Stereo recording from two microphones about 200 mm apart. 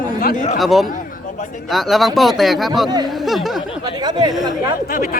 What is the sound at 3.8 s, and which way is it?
Speech, 20° right (ahead or behind).